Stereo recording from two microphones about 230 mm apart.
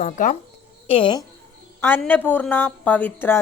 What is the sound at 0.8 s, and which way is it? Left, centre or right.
Speech, left.